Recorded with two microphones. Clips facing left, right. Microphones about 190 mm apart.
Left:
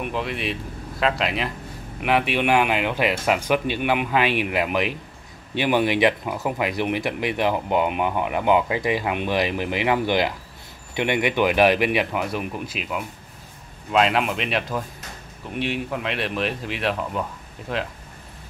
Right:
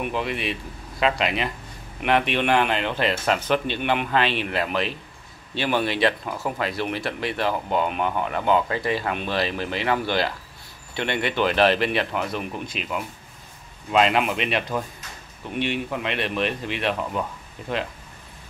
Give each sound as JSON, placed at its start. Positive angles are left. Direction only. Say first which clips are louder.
{"t": 0.0, "sound": "speech", "louder": "even", "side_deg": 0}